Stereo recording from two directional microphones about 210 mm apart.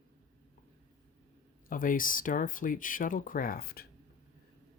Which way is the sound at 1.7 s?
40° left (ahead or behind).